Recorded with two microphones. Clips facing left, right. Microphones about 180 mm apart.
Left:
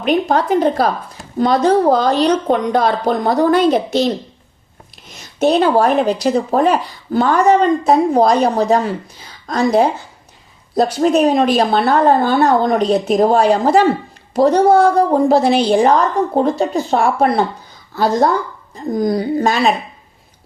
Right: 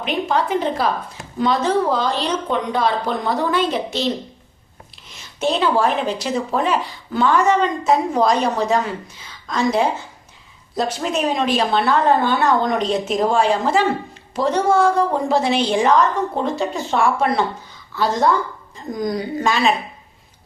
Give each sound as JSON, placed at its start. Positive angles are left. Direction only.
{"t": 0.0, "sound": "a woman's voice", "side_deg": 40}
{"t": 5.1, "sound": "a sound", "side_deg": 40}
{"t": 5.7, "sound": "a woman's voice", "side_deg": 40}